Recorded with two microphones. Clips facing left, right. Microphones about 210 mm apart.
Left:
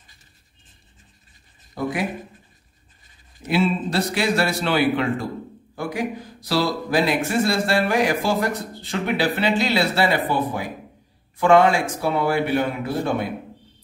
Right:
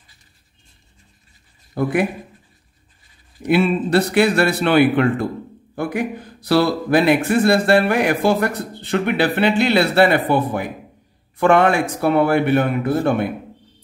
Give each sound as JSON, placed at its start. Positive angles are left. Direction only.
{"t": 1.8, "sound": "speech", "side_deg": -60}
{"t": 3.4, "sound": "speech", "side_deg": -60}